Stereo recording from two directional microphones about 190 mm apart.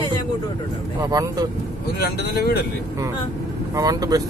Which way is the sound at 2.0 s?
55° left (ahead or behind).